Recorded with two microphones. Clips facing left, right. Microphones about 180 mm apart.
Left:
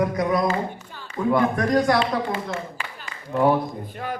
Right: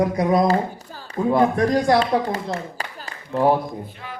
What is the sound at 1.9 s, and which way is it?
Speech, 40° right (ahead or behind).